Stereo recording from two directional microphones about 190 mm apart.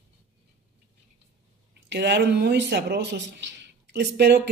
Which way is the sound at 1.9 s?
65° right (ahead or behind).